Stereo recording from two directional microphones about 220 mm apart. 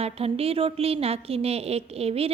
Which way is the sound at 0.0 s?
25° right (ahead or behind).